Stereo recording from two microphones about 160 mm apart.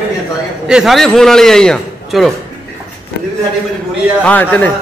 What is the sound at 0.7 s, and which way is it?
A man's voice, 5° right (ahead or behind).